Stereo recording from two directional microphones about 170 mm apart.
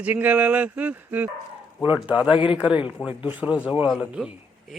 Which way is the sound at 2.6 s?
5° right (ahead or behind).